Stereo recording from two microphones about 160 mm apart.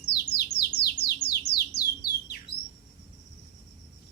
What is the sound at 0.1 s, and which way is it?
Bird, 90° left.